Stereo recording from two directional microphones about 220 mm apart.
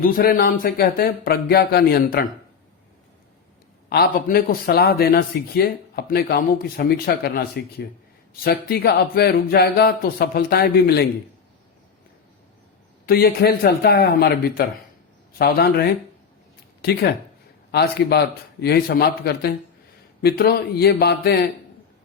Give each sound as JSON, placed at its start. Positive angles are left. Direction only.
{"t": 0.0, "sound": "speech", "side_deg": 40}
{"t": 3.8, "sound": "speech", "side_deg": 45}
{"t": 13.1, "sound": "speech", "side_deg": 45}